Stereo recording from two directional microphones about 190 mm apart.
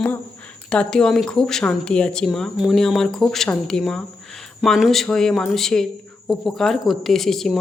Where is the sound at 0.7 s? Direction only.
5° left (ahead or behind).